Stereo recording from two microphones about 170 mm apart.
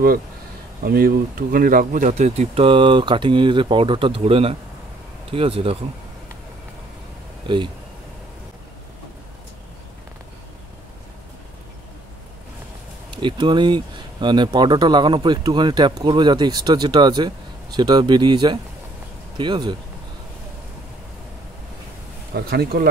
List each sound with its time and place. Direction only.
0.8 s speech: 60° right (ahead or behind); by 5.8 s 35° right (ahead or behind)
7.4 s speech: 30° right (ahead or behind)
13.1 s speech: 25° right (ahead or behind)
22.3 s speech: 65° right (ahead or behind)